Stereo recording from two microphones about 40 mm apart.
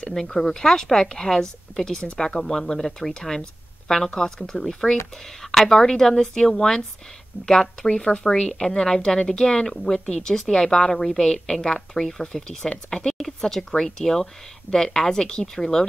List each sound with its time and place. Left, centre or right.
0.1 s a woman's voice: centre
7.3 s speech: left
7.9 s a woman's voice: left